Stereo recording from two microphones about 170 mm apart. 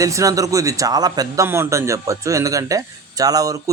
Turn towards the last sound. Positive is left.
turn(degrees=-20)  # may be behind; listen again after turning